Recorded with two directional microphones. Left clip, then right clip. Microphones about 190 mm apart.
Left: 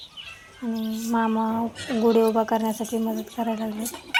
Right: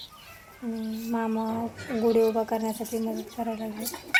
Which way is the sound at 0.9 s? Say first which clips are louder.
Left 6 dB; 15° left (ahead or behind).